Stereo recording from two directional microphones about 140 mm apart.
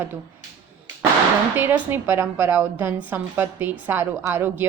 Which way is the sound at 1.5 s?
15° right (ahead or behind).